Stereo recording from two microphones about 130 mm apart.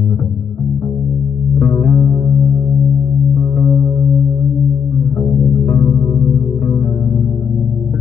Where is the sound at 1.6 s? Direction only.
20° left (ahead or behind).